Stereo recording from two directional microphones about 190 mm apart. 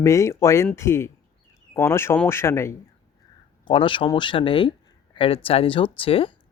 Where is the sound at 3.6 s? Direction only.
25° left (ahead or behind).